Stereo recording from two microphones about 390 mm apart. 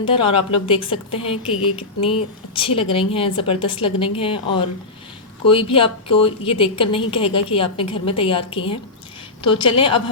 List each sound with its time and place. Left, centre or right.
0.0 s a woman's voice: centre